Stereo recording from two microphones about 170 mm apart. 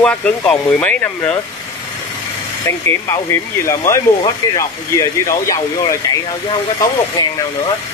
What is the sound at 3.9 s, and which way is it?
Speech, 15° left (ahead or behind).